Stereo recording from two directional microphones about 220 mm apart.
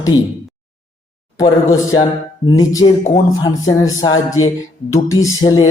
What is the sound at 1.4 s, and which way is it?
Music, 15° left (ahead or behind).